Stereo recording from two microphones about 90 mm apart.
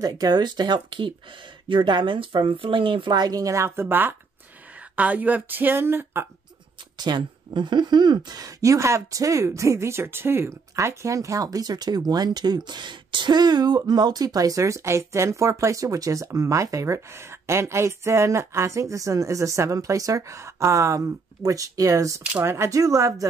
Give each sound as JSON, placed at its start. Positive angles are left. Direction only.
{"t": 0.0, "sound": "speech", "side_deg": -45}
{"t": 7.0, "sound": "speech", "side_deg": -55}
{"t": 22.4, "sound": "speech", "side_deg": -25}
{"t": 22.7, "sound": "speech", "side_deg": -35}